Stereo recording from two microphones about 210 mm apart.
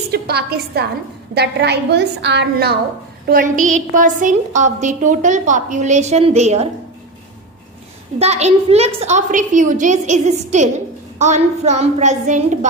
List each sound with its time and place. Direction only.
0.1 s a woman's voice: 50° right (ahead or behind)
3.2 s a woman's voice: 40° right (ahead or behind)
8.2 s a woman's voice: 30° right (ahead or behind)